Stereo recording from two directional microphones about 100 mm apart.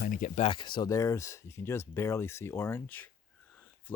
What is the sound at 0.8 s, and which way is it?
Speech, 35° left (ahead or behind).